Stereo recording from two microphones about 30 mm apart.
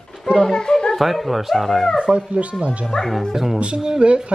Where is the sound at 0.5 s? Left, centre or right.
Left.